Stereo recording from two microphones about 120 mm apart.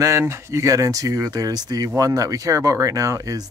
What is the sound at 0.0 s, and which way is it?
Speech, 25° right (ahead or behind).